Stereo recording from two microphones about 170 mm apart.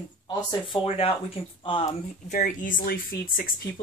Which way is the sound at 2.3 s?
50° left (ahead or behind).